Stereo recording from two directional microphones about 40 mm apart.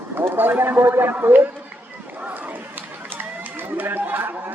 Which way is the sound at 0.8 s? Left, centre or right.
Right.